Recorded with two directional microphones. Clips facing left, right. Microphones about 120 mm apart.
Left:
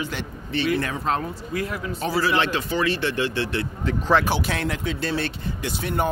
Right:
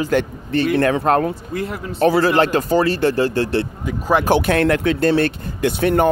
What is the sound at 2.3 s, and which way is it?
Speech, 40° right (ahead or behind).